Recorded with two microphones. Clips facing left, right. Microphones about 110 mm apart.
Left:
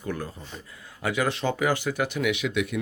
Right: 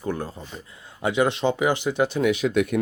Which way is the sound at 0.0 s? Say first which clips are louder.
Right 4 dB; 30° right (ahead or behind).